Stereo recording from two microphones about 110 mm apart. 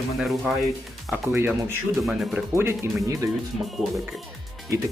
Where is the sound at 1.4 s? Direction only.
20° right (ahead or behind).